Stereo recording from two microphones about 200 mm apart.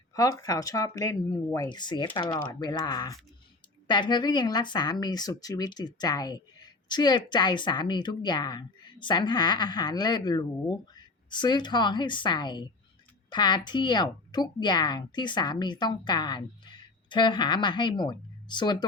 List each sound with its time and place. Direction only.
0.1 s speech: 20° left (ahead or behind)